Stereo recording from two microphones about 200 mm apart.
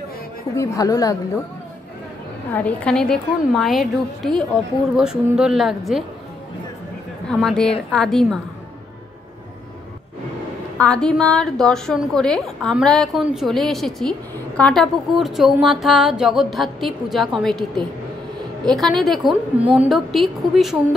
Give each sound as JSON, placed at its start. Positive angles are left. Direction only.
{"t": 0.6, "sound": "speech", "side_deg": 15}
{"t": 2.5, "sound": "a woman's voice", "side_deg": 5}
{"t": 7.2, "sound": "a woman's voice", "side_deg": 0}
{"t": 10.8, "sound": "a woman's voice", "side_deg": 5}